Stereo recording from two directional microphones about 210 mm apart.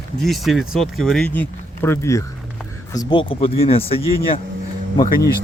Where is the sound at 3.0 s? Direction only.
25° left (ahead or behind).